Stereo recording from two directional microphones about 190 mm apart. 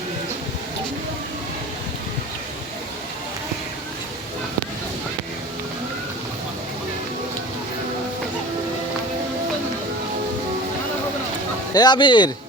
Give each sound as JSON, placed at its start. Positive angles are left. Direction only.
{"t": 11.7, "sound": "speech", "side_deg": 20}